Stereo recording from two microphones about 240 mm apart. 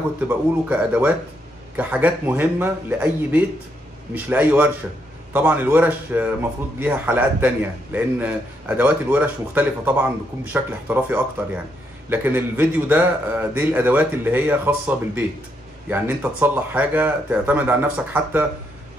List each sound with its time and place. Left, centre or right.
0.3 s a man's voice: centre